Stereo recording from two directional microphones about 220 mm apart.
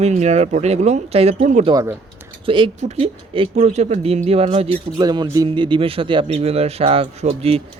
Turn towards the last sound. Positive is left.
turn(degrees=-25)  # may be behind; listen again after turning